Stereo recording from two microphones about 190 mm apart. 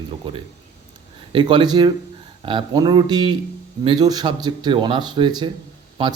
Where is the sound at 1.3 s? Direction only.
25° right (ahead or behind).